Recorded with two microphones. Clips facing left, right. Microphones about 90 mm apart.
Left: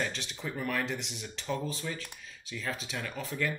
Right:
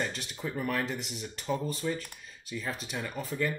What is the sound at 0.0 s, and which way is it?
Speech, 5° right (ahead or behind).